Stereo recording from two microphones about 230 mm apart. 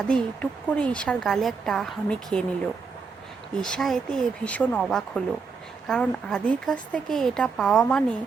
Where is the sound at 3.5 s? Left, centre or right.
Centre.